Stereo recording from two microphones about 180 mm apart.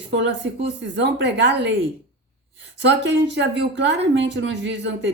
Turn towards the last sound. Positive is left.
turn(degrees=-80)